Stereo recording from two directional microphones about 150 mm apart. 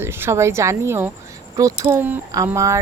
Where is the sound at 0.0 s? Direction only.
15° right (ahead or behind).